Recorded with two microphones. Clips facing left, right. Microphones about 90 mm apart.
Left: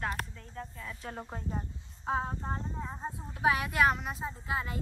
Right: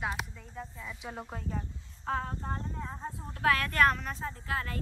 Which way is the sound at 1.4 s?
25° left (ahead or behind).